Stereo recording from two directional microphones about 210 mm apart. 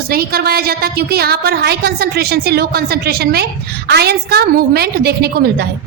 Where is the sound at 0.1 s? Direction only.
45° right (ahead or behind).